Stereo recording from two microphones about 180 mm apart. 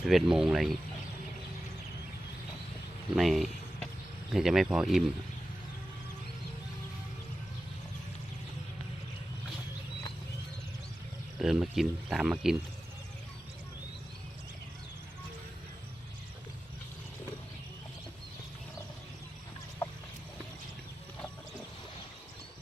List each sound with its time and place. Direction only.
0.0 s speech: centre (ahead or behind)
3.2 s speech: centre (ahead or behind)
11.3 s speech: centre (ahead or behind)